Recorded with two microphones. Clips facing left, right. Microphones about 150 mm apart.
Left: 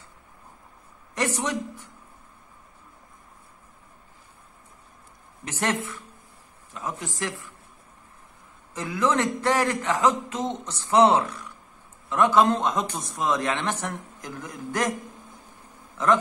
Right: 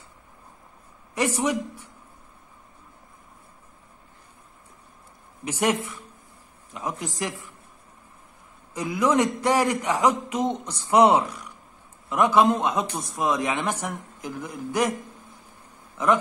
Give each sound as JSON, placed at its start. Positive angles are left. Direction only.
{"t": 1.1, "sound": "speech", "side_deg": -10}
{"t": 5.4, "sound": "speech", "side_deg": -10}
{"t": 8.7, "sound": "speech", "side_deg": -10}